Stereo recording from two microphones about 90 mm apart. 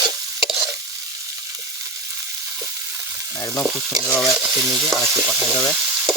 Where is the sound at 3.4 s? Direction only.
35° left (ahead or behind).